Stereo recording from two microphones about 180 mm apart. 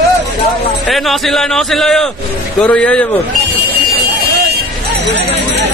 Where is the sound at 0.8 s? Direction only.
Centre (ahead or behind).